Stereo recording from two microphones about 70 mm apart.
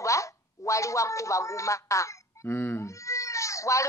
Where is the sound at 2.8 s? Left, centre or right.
Left.